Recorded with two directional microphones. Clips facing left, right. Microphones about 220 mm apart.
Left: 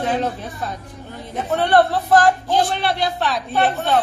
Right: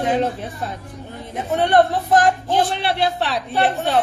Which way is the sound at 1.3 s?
15° right (ahead or behind).